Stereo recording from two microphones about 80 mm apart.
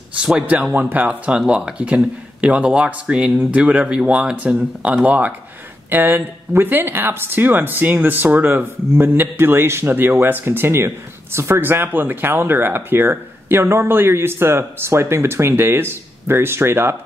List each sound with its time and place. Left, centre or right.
0.2 s speech: centre; by 16.9 s right